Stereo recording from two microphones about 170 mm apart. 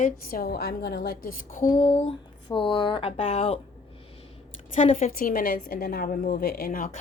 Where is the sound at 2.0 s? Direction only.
30° left (ahead or behind).